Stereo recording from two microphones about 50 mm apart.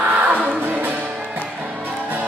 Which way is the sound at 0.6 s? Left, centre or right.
Right.